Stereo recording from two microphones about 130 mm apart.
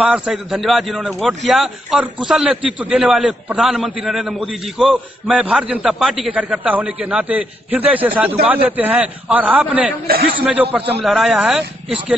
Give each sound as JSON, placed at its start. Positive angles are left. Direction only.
{"t": 0.0, "sound": "a man's voice", "side_deg": -10}
{"t": 11.0, "sound": "a man's voice", "side_deg": 0}